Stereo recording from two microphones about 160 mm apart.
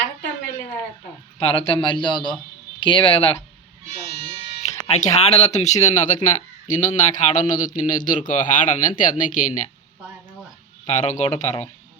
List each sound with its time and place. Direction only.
1.4 s a man's voice: 35° left (ahead or behind)
4.9 s a man's voice: 45° left (ahead or behind)
10.8 s a man's voice: 50° left (ahead or behind)